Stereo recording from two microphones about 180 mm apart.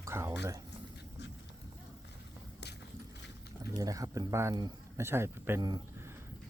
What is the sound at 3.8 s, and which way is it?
Speech, 20° right (ahead or behind).